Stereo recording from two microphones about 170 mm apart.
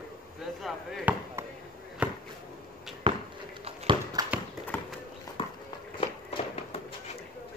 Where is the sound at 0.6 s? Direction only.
Centre (ahead or behind).